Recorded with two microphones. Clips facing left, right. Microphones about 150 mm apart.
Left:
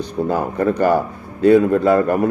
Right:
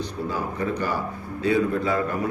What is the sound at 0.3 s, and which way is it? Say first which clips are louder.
Speech: left 9 dB; 55° left (ahead or behind).